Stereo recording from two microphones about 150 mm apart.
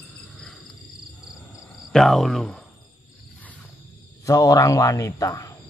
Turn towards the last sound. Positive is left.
turn(degrees=20)  # may be behind; listen again after turning